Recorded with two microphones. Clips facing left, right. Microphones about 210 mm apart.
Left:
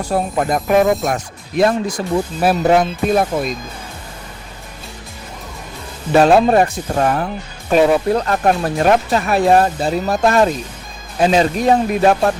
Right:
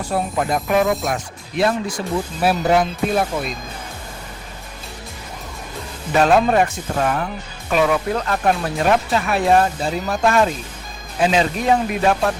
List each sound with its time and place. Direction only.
0.1 s speech: 45° left (ahead or behind)
6.1 s speech: 35° left (ahead or behind)